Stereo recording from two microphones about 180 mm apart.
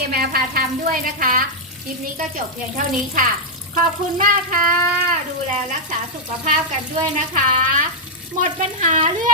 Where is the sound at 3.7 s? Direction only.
45° right (ahead or behind).